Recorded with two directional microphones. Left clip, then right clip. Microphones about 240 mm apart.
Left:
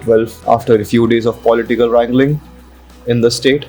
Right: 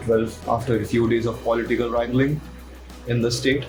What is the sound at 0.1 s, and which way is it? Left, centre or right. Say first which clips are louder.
Speech: left 10 dB; left.